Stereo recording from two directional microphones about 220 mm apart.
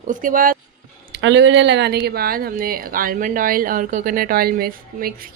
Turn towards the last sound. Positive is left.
turn(degrees=-40)  # may be behind; listen again after turning